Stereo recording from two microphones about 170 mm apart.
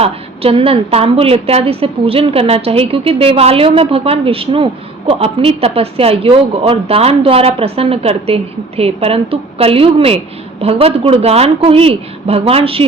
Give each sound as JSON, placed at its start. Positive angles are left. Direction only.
{"t": 0.0, "sound": "a woman's voice", "side_deg": -35}